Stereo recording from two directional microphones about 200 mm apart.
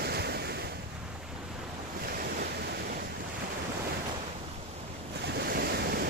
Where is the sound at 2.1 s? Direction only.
50° right (ahead or behind).